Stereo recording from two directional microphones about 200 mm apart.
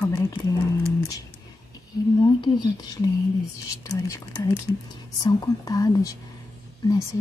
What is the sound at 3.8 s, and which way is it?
Speech, 15° left (ahead or behind).